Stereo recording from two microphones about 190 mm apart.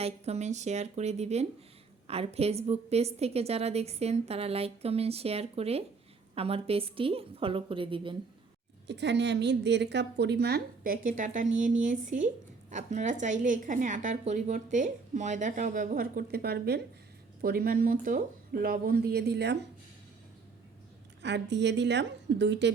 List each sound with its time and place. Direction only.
0.0 s a woman's voice: 35° right (ahead or behind)
8.9 s a woman's voice: 65° right (ahead or behind)
21.2 s a woman's voice: 65° right (ahead or behind)